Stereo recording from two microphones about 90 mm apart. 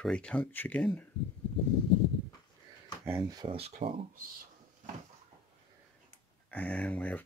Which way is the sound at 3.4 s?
90° right.